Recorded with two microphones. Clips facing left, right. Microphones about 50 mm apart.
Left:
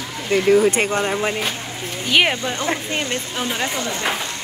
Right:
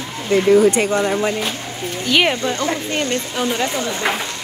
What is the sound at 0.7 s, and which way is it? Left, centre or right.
Speech, left.